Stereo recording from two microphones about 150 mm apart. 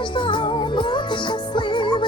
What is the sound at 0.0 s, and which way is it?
Music, 30° left (ahead or behind).